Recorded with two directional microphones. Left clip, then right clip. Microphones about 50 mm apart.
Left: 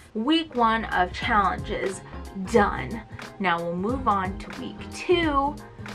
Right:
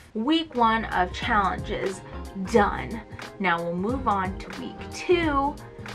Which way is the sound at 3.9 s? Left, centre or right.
Centre.